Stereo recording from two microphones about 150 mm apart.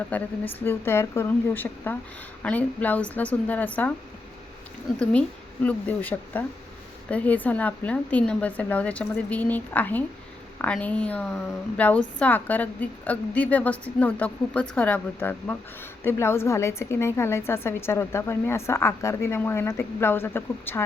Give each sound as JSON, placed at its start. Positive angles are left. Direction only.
{"t": 0.1, "sound": "a woman's voice", "side_deg": 15}
{"t": 5.6, "sound": "a woman's voice", "side_deg": 10}